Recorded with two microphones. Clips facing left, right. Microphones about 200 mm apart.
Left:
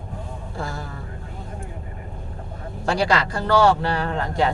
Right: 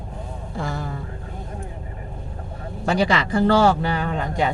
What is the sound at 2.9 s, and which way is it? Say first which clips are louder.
Speech: right 1 dB; 20° right (ahead or behind).